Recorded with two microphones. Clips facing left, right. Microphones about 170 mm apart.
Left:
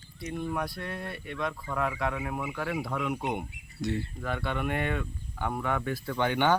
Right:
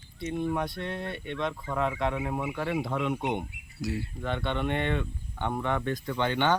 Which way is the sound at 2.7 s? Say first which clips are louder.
Right 3 dB; centre (ahead or behind).